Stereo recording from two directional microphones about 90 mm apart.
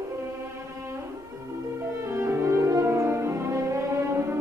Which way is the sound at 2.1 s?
30° right (ahead or behind).